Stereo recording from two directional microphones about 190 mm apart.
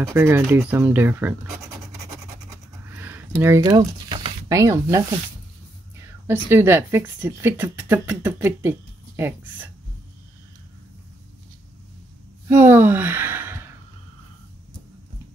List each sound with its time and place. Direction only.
0.0 s speech: 15° right (ahead or behind)
2.9 s a sound: 10° right (ahead or behind)
6.2 s speech: 10° right (ahead or behind)
12.4 s speech: 10° right (ahead or behind)